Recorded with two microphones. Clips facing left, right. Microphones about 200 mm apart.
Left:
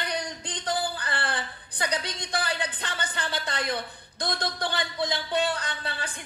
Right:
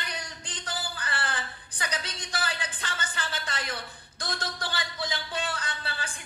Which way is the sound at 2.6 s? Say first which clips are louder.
Left 4 dB; 35° left (ahead or behind).